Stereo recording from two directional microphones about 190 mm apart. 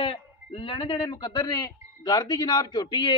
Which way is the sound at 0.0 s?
30° left (ahead or behind).